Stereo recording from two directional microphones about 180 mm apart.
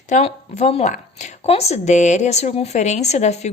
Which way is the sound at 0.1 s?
40° left (ahead or behind).